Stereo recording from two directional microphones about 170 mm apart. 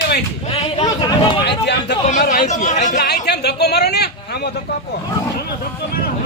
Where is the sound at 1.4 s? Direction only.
80° left.